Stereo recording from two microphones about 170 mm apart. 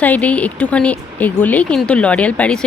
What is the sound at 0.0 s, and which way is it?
Speech, 10° left (ahead or behind).